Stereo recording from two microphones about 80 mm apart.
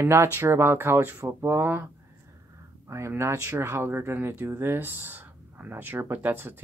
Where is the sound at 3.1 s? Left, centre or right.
Right.